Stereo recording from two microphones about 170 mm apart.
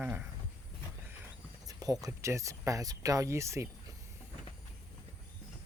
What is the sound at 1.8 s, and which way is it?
Speech, 20° right (ahead or behind).